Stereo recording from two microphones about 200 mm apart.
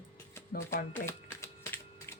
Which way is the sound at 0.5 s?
40° left (ahead or behind).